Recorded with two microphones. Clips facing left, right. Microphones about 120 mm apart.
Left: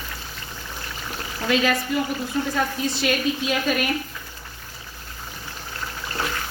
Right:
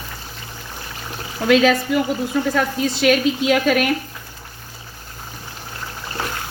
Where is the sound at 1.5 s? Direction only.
90° right.